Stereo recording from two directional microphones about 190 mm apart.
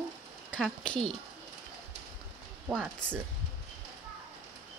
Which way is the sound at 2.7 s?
5° right (ahead or behind).